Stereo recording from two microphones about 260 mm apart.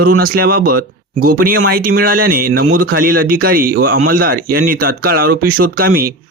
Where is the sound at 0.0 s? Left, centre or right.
Right.